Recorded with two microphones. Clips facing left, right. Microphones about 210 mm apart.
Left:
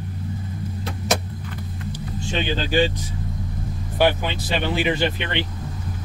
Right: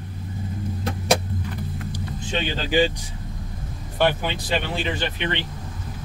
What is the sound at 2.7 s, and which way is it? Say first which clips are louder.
Speech: even; 15° right (ahead or behind).